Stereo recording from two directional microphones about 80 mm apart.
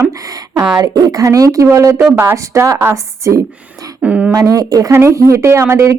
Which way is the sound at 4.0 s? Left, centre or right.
Centre.